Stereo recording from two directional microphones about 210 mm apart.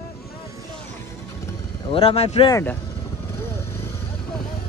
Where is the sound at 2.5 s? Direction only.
15° left (ahead or behind).